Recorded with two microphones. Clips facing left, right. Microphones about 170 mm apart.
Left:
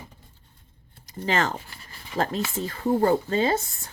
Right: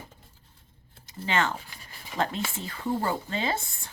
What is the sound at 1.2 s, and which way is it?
Speech, 40° left (ahead or behind).